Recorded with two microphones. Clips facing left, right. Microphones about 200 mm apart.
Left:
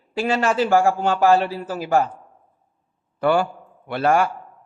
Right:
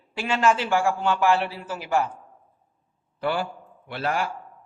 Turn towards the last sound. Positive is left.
turn(degrees=50)  # may be behind; listen again after turning